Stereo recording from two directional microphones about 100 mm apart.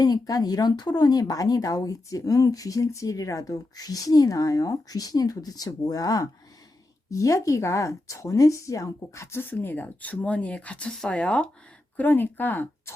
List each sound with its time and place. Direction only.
0.0 s speech: 40° left (ahead or behind); by 12.9 s 20° left (ahead or behind)